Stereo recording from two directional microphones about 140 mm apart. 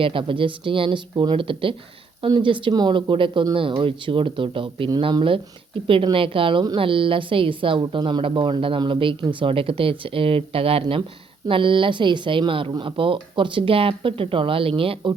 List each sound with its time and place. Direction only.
0.0 s speech: 40° right (ahead or behind)